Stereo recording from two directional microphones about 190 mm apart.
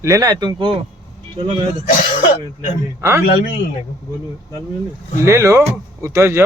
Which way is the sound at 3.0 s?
15° right (ahead or behind).